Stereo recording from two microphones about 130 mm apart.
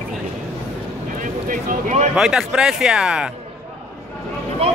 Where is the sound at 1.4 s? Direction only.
80° right.